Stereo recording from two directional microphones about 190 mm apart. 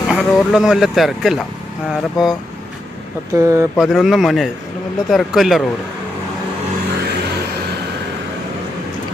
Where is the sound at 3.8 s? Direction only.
Centre (ahead or behind).